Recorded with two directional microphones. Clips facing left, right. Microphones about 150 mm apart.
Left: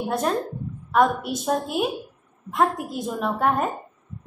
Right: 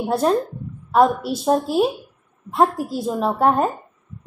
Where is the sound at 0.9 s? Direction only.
30° right (ahead or behind).